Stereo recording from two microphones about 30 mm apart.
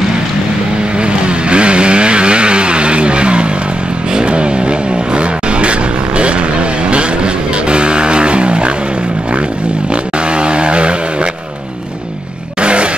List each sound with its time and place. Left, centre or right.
0.9 s vehicle: right
7.7 s music: right
10.3 s vehicle: right
12.6 s a sound: right